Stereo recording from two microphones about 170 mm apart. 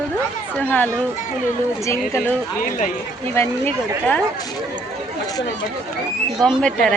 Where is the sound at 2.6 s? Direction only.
50° left (ahead or behind).